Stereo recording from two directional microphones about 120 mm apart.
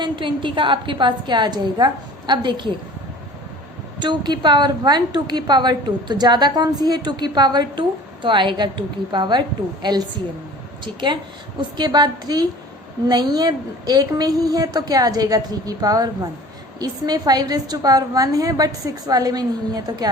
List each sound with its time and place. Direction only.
0.0 s a woman's voice: 45° right (ahead or behind)
4.0 s a woman's voice: 40° right (ahead or behind)
11.8 s a woman's voice: 35° right (ahead or behind)